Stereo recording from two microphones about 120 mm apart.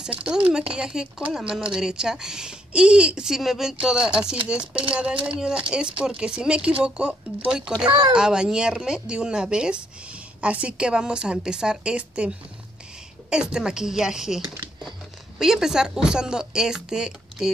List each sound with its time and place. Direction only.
0.0 s speech: 5° right (ahead or behind)
7.8 s speech: 35° right (ahead or behind)
8.1 s speech: 5° right (ahead or behind)